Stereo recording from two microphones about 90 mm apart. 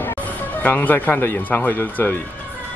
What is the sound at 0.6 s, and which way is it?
Speech, 20° left (ahead or behind).